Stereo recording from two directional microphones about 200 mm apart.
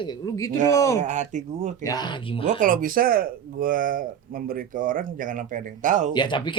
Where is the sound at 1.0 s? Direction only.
35° right (ahead or behind).